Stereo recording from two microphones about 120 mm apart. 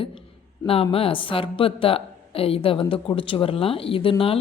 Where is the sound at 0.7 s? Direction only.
55° left (ahead or behind).